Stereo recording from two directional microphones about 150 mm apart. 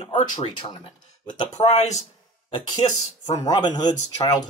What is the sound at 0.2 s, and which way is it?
Speech, 30° left (ahead or behind).